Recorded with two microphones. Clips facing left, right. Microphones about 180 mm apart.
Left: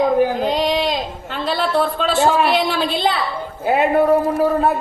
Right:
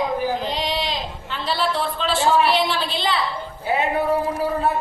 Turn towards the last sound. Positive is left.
turn(degrees=50)  # may be behind; listen again after turning